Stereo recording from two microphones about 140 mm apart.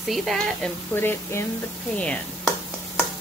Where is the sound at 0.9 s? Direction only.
15° left (ahead or behind).